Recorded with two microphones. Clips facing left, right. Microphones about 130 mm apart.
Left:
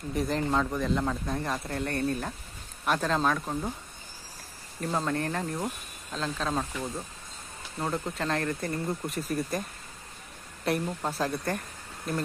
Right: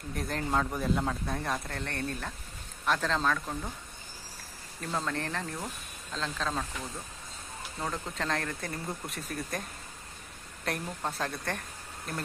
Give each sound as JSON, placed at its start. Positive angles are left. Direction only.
{"t": 0.1, "sound": "speech", "side_deg": 0}
{"t": 1.3, "sound": "speech", "side_deg": 5}
{"t": 3.3, "sound": "speech", "side_deg": 20}
{"t": 4.8, "sound": "speech", "side_deg": 15}
{"t": 7.8, "sound": "speech", "side_deg": 5}
{"t": 10.7, "sound": "speech", "side_deg": 5}